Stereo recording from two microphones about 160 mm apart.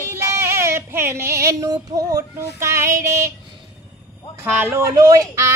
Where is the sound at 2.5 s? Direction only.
20° right (ahead or behind).